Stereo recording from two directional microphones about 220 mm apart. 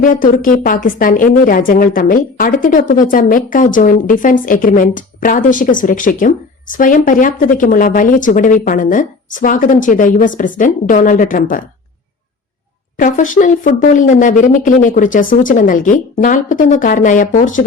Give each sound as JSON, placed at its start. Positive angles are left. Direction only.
{"t": 0.0, "sound": "a woman's voice", "side_deg": 35}
{"t": 13.0, "sound": "a woman's voice", "side_deg": 35}